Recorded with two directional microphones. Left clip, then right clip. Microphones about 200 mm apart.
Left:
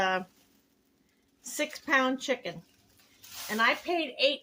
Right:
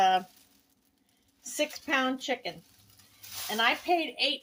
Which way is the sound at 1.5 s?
25° left (ahead or behind).